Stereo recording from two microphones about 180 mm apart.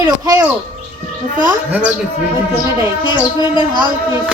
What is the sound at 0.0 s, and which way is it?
Speech, 20° right (ahead or behind).